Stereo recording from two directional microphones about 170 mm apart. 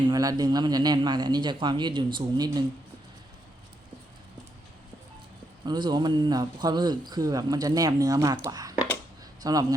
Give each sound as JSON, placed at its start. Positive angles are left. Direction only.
{"t": 0.1, "sound": "a man's voice", "side_deg": -20}
{"t": 5.6, "sound": "a man's voice", "side_deg": -25}